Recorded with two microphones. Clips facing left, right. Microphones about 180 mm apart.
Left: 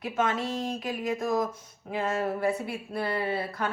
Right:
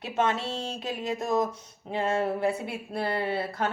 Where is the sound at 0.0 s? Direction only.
25° right (ahead or behind).